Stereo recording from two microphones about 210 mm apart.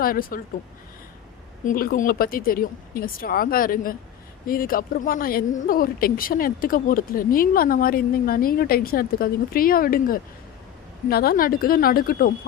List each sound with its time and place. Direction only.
0.0 s speech: 45° left (ahead or behind)
1.6 s speech: 45° left (ahead or behind)